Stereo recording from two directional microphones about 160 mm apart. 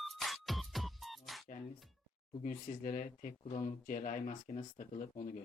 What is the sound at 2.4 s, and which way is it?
Speech, 55° left (ahead or behind).